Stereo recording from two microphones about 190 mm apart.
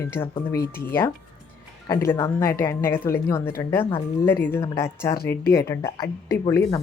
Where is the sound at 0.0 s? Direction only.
10° left (ahead or behind).